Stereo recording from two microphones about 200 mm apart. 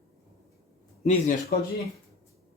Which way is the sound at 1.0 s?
35° left (ahead or behind).